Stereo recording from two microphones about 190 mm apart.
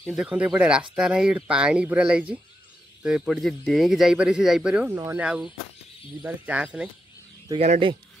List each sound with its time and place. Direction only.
0.0 s speech: 5° right (ahead or behind)
7.5 s speech: 40° right (ahead or behind)